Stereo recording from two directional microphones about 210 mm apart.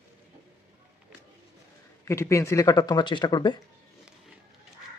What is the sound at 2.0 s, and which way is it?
Speech, 15° left (ahead or behind).